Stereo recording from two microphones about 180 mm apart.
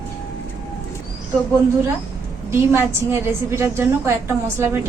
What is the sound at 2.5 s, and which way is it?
A woman's voice, 15° right (ahead or behind).